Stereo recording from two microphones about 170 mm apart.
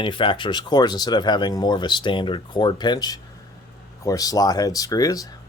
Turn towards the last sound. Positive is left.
turn(degrees=20)  # may be behind; listen again after turning